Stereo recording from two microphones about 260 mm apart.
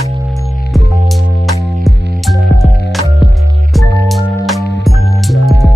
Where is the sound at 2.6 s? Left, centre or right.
Left.